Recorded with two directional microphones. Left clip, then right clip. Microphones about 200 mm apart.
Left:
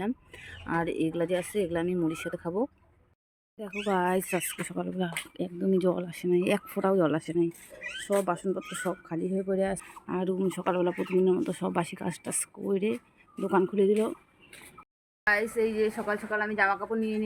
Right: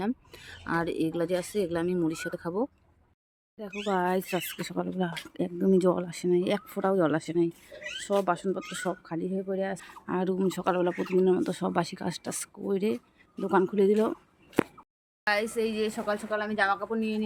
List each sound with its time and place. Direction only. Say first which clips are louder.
0.0 s speech: right 1 dB; centre (ahead or behind)
9.9 s speech: right 1 dB; 5° right (ahead or behind)
15.2 s speech: left 1 dB; centre (ahead or behind)
17.0 s speech: even; 5° right (ahead or behind)